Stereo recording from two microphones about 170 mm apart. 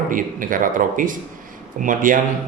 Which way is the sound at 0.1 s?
55° right (ahead or behind).